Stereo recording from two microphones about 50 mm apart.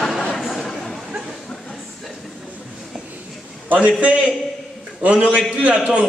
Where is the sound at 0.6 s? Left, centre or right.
Centre.